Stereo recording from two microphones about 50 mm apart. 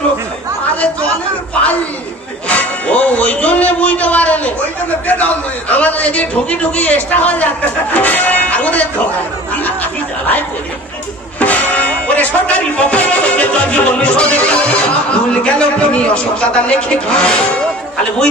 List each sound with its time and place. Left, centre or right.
2.5 s music: left
5.0 s a man's voice: left
7.9 s music: left
9.6 s a sound: left
11.3 s music: left
16.1 s speech: left